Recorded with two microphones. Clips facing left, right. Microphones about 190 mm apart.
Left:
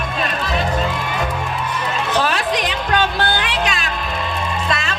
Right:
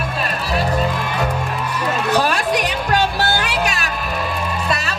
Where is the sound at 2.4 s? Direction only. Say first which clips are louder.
Right 1 dB; 10° right (ahead or behind).